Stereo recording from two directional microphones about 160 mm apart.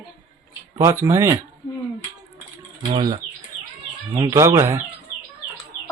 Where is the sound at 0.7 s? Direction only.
20° right (ahead or behind).